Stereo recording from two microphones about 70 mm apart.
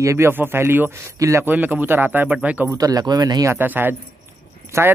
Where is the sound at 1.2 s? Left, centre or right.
Right.